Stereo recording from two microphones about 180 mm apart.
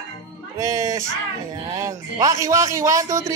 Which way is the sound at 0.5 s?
15° right (ahead or behind).